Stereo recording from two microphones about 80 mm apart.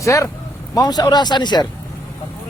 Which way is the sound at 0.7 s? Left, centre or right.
Left.